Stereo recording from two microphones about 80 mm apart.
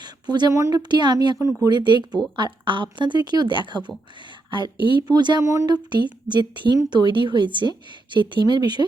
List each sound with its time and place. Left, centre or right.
0.0 s a sound: right
0.5 s speech: right
0.8 s a woman's voice: right
2.3 s speech: right
5.4 s speech: right
5.6 s a woman's voice: right